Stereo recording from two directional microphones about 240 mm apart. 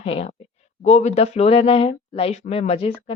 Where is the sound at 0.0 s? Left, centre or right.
Left.